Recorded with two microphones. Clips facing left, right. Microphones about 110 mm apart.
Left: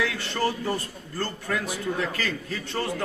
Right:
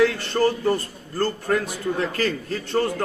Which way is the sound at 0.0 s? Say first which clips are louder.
Right 8 dB; 45° right (ahead or behind).